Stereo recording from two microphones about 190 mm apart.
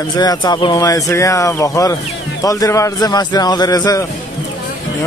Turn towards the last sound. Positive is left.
turn(degrees=20)  # may be behind; listen again after turning